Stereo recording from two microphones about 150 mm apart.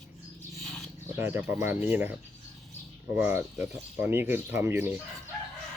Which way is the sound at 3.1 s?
15° right (ahead or behind).